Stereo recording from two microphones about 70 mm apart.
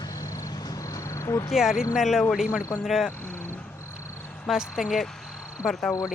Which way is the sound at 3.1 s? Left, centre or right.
Left.